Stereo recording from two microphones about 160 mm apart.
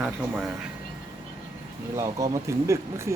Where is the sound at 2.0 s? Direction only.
20° right (ahead or behind).